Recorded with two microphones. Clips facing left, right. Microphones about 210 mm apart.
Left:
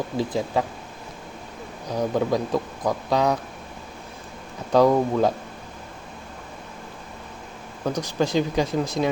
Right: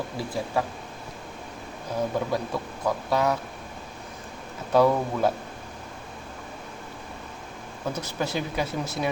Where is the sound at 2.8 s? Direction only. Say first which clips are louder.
Left 1 dB; 15° left (ahead or behind).